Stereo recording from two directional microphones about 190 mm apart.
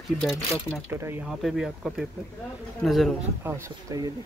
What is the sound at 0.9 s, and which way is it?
Speech, 10° right (ahead or behind).